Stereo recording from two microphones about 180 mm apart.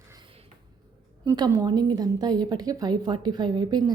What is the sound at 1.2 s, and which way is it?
Speech, 20° right (ahead or behind).